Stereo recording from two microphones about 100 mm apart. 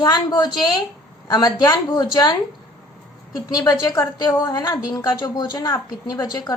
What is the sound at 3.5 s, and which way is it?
A woman's voice, 40° left (ahead or behind).